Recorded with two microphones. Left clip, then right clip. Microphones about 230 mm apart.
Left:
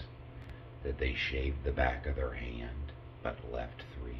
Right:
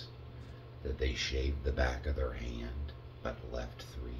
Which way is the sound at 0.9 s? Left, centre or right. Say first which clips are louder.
Left 1 dB; centre.